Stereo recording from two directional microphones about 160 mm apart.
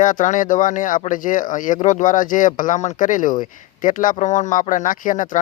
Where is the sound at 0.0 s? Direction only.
55° left (ahead or behind).